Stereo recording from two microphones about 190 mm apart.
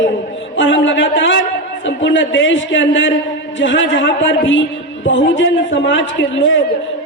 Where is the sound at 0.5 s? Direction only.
75° left (ahead or behind).